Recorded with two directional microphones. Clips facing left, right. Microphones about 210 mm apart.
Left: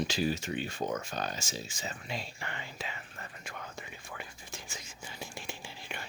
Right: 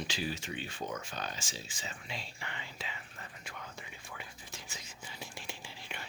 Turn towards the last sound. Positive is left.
turn(degrees=45)  # may be behind; listen again after turning